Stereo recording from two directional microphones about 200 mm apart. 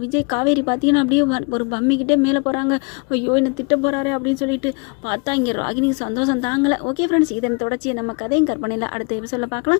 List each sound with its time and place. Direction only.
0.3 s a woman's voice: 25° left (ahead or behind)
8.3 s a woman's voice: 25° left (ahead or behind)